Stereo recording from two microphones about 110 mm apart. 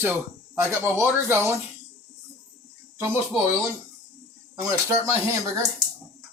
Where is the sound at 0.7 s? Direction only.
25° right (ahead or behind).